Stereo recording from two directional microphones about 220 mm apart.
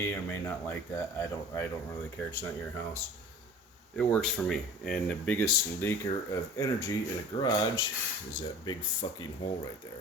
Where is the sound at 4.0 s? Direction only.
5° left (ahead or behind); by 9.2 s 25° left (ahead or behind).